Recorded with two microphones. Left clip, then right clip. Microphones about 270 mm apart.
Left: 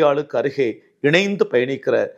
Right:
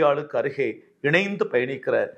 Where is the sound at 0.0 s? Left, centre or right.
Left.